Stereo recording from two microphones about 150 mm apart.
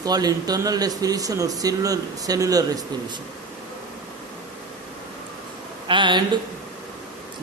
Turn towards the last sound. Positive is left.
turn(degrees=-30)  # may be behind; listen again after turning